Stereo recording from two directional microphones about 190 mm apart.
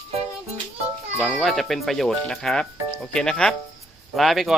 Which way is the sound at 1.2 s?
5° left (ahead or behind).